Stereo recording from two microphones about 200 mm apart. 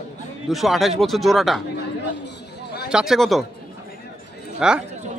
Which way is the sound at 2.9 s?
5° right (ahead or behind).